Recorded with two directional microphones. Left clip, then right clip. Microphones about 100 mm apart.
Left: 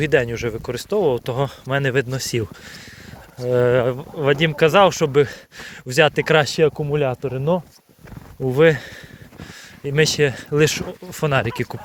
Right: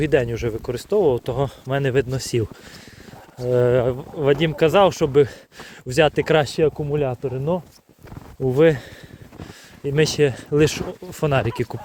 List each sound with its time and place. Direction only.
0.0 s speech: 30° right (ahead or behind)
0.3 s speech: 40° right (ahead or behind)
6.4 s speech: 5° left (ahead or behind)
8.4 s speech: 25° right (ahead or behind)
9.4 s speech: 35° right (ahead or behind)